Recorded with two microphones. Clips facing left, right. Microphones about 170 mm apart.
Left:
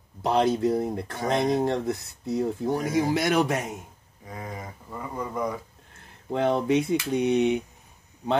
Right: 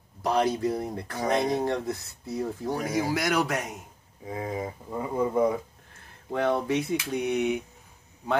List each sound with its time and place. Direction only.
0.2 s speech: 25° left (ahead or behind)
4.3 s speech: 20° right (ahead or behind)
6.3 s speech: 20° left (ahead or behind)